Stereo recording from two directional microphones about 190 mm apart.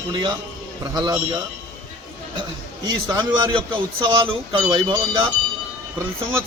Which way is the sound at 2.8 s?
25° right (ahead or behind).